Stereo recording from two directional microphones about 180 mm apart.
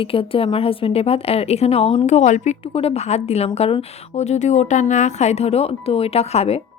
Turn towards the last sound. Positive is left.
turn(degrees=35)  # may be behind; listen again after turning